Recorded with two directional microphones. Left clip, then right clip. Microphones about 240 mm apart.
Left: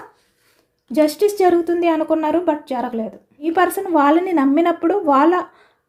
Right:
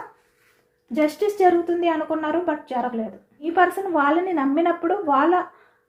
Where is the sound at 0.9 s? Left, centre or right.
Left.